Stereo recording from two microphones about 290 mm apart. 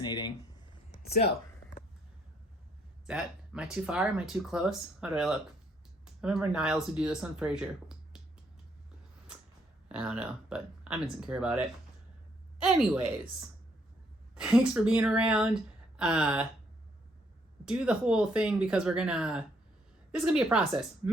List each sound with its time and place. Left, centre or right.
0.0 s a sound: centre
1.0 s speech: left
3.1 s speech: centre
9.9 s speech: centre
14.3 s speech: centre
17.7 s speech: centre